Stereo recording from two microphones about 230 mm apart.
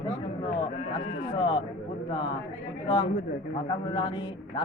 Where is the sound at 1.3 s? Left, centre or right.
Left.